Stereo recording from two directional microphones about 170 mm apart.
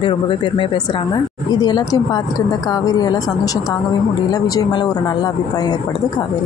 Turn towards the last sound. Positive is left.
turn(degrees=25)  # may be behind; listen again after turning